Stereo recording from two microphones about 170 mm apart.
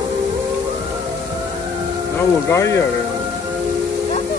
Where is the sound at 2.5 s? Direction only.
15° left (ahead or behind).